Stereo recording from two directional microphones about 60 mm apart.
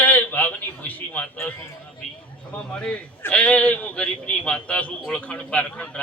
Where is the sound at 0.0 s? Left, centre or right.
Left.